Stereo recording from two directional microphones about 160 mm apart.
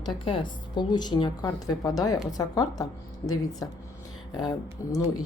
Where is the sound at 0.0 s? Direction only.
30° left (ahead or behind).